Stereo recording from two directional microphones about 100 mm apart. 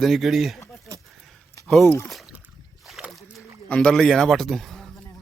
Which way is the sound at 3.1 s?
Centre (ahead or behind).